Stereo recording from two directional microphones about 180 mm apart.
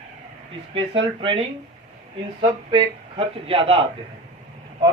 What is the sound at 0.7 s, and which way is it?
Speech, 30° right (ahead or behind).